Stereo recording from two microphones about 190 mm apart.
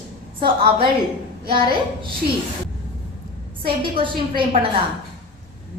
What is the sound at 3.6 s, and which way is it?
Speech, 25° right (ahead or behind).